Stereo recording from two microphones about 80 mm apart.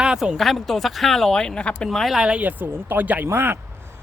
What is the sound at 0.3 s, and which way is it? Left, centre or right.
Speech, centre.